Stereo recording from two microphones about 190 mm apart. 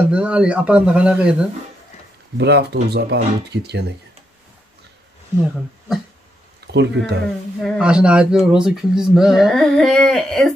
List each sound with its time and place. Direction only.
0.1 s speech: 5° right (ahead or behind)
2.3 s speech: 65° right (ahead or behind)
6.7 s speech: 65° right (ahead or behind)
7.6 s speech: 5° right (ahead or behind)